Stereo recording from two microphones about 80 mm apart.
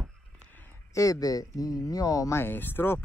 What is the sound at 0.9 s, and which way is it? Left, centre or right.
Speech, left.